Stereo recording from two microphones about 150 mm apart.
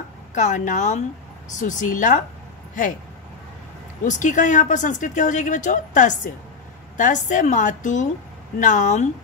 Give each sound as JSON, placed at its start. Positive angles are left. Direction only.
{"t": 0.3, "sound": "speech", "side_deg": 55}
{"t": 4.0, "sound": "speech", "side_deg": 55}